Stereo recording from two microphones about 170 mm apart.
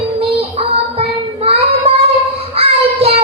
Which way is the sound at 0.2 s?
35° right (ahead or behind).